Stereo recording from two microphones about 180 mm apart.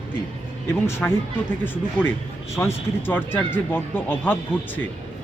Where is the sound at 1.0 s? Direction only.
10° left (ahead or behind).